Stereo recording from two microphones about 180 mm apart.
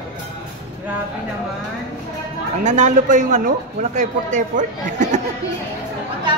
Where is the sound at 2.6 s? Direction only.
40° right (ahead or behind).